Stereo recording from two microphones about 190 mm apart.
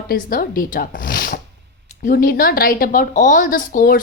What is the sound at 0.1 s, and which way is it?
A woman's voice, 50° left (ahead or behind).